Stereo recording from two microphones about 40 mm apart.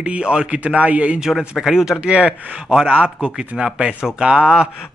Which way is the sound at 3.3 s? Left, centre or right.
Centre.